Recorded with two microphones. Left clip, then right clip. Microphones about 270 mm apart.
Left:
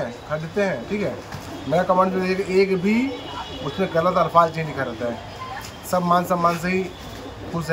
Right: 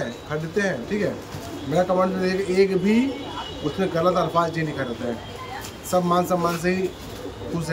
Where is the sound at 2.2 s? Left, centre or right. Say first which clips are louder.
Left 1 dB; centre.